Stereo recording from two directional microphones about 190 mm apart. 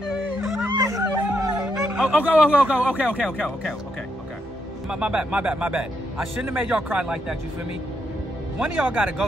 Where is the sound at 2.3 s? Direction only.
10° right (ahead or behind).